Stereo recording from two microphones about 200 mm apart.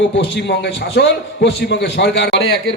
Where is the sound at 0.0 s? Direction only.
60° left (ahead or behind).